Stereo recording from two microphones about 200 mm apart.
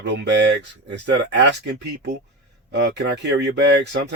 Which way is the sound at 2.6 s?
60° right (ahead or behind).